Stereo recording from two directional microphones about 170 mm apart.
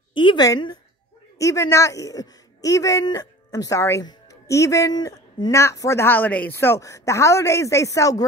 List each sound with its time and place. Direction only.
0.1 s a woman's voice: 30° left (ahead or behind)